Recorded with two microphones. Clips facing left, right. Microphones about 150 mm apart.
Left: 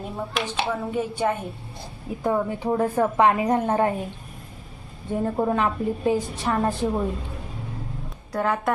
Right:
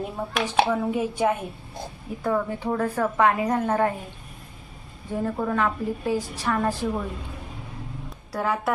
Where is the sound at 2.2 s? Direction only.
20° left (ahead or behind).